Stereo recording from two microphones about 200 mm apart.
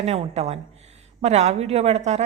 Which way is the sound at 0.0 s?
30° right (ahead or behind).